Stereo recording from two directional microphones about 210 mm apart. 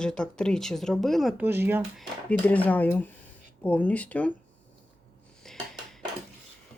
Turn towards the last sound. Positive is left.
turn(degrees=0)  # may be behind; listen again after turning